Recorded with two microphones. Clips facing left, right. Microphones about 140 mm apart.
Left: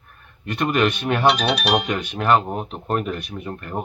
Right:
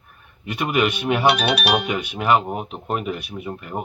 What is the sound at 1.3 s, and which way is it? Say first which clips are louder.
Speech: even; 65° right (ahead or behind).